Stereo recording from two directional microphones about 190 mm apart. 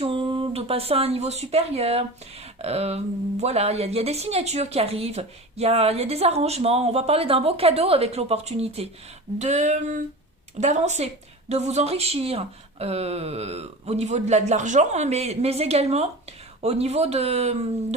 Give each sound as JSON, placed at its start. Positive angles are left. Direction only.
{"t": 0.0, "sound": "a woman's voice", "side_deg": -25}